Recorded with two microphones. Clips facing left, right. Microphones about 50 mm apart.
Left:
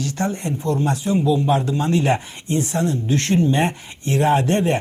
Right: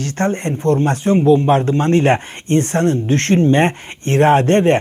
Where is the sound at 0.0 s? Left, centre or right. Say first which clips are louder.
Right 5 dB; right.